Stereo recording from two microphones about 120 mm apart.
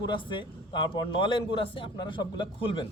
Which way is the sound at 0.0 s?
40° left (ahead or behind).